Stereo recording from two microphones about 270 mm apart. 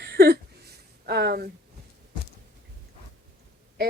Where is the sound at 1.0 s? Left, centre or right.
Right.